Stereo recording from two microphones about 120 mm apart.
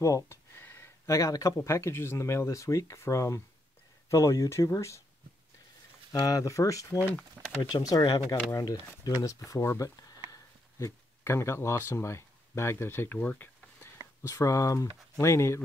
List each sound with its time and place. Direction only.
0.0 s speech: 25° left (ahead or behind)
6.1 s speech: 30° left (ahead or behind)
7.4 s speech: 10° right (ahead or behind)
7.7 s speech: 30° left (ahead or behind); by 13.8 s 15° left (ahead or behind)
14.2 s speech: 25° left (ahead or behind)